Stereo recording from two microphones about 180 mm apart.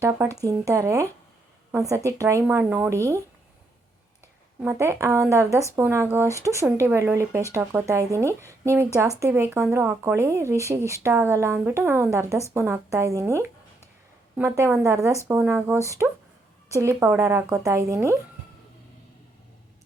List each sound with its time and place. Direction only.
0.0 s speech: 10° right (ahead or behind)
2.0 s speech: 15° right (ahead or behind)
4.6 s speech: 15° right (ahead or behind)